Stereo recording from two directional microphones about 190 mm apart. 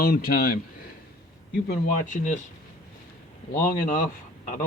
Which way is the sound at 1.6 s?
45° left (ahead or behind).